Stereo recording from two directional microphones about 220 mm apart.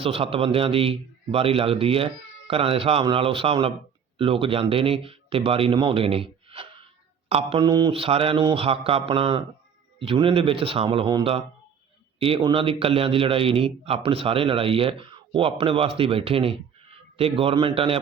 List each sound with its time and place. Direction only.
0.0 s a man's voice: 25° right (ahead or behind)